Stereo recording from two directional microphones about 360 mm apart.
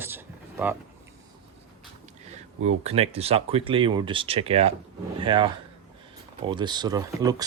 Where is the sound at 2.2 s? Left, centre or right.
Centre.